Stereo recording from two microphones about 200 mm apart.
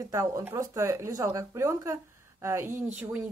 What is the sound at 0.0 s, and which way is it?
A woman's voice, 15° right (ahead or behind).